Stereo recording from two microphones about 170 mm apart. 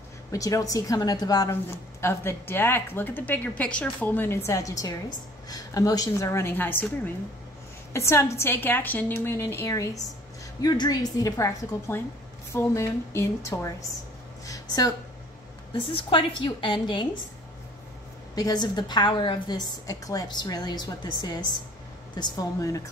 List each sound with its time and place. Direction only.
0.3 s a woman's voice: 20° left (ahead or behind)
7.9 s a woman's voice: 15° left (ahead or behind)
14.4 s a sound: 20° left (ahead or behind)
15.7 s a woman's voice: 30° left (ahead or behind)
18.3 s a woman's voice: 20° left (ahead or behind)